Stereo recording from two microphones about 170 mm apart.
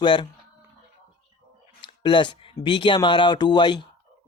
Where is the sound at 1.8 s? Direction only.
30° left (ahead or behind).